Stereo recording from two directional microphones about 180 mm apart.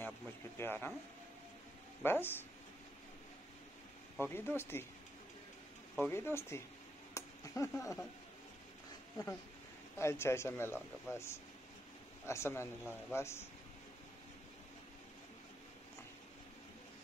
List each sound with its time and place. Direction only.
0.6 s speech: 10° left (ahead or behind)
2.0 s a man's voice: 10° left (ahead or behind)
4.2 s a man's voice: 10° left (ahead or behind)
6.0 s a man's voice: 15° left (ahead or behind)
7.2 s a sound: 15° left (ahead or behind)
9.9 s a man's voice: 15° left (ahead or behind)